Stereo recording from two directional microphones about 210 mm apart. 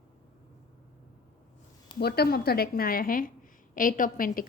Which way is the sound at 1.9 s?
50° left (ahead or behind).